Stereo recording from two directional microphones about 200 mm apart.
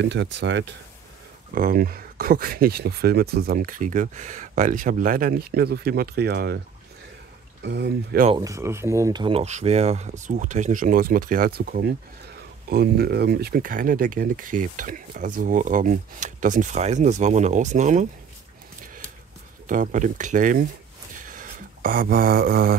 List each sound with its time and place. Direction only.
0.0 s speech: 60° right (ahead or behind)
1.5 s speech: 45° right (ahead or behind)
7.6 s speech: 60° right (ahead or behind)
8.4 s speech: 15° right (ahead or behind); by 18.0 s 35° right (ahead or behind)
19.7 s speech: 40° right (ahead or behind)
21.2 s a sound: 45° right (ahead or behind)